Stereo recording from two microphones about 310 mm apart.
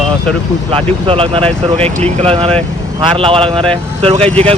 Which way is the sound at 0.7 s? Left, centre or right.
Centre.